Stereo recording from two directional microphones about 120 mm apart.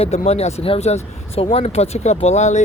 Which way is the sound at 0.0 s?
60° left (ahead or behind).